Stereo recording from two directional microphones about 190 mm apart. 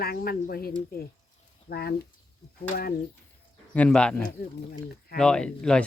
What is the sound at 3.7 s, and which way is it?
Speech, 5° left (ahead or behind).